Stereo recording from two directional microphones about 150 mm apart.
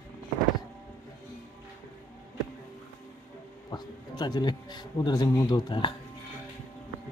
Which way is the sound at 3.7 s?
30° left (ahead or behind).